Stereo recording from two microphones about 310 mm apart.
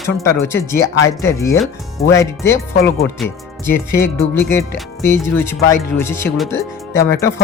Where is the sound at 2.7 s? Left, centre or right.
Left.